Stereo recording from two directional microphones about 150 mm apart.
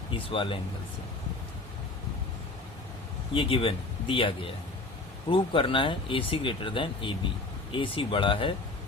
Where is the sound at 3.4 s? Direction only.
35° left (ahead or behind).